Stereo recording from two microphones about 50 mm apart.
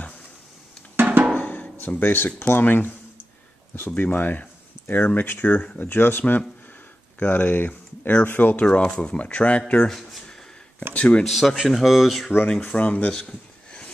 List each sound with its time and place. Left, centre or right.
0.9 s music: right
1.3 s music: left
2.6 s speech: left
5.4 s speech: left
8.6 s speech: centre
9.8 s speech: centre
11.0 s speech: left
11.2 s speech: centre
12.6 s speech: left
13.1 s a sound: centre